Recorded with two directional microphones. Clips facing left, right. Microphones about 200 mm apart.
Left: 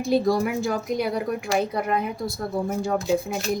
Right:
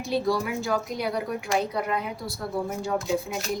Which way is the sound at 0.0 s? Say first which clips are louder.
Left 5 dB; 50° left (ahead or behind).